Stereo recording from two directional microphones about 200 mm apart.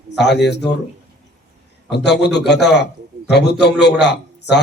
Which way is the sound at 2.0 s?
60° left (ahead or behind).